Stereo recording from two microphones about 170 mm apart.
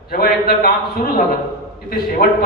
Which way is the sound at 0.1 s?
65° left (ahead or behind).